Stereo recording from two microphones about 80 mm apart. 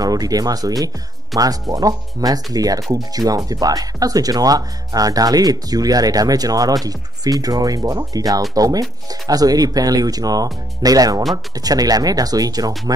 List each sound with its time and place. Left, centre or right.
0.0 s speech: right